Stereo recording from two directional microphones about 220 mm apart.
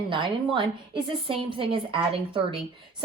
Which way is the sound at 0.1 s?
20° right (ahead or behind).